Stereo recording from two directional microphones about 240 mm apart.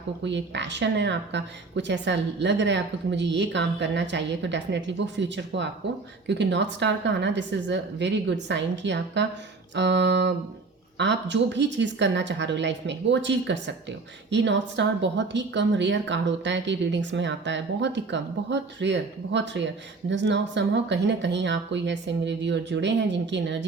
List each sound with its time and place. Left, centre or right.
0.3 s speech: right